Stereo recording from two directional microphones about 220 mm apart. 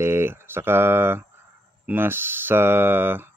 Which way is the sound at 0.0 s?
10° right (ahead or behind).